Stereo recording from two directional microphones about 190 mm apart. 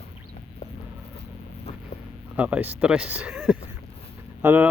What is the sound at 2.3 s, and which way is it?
Speech, 10° right (ahead or behind).